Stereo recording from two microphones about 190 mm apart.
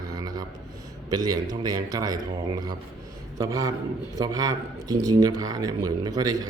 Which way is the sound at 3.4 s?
20° right (ahead or behind).